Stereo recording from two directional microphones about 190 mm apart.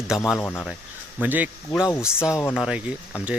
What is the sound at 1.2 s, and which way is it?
A man's voice, 10° right (ahead or behind).